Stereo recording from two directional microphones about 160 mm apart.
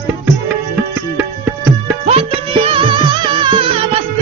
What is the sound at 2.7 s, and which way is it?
Music, 30° right (ahead or behind).